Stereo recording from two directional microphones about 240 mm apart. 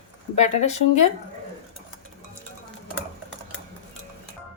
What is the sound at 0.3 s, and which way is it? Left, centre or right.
Speech, left.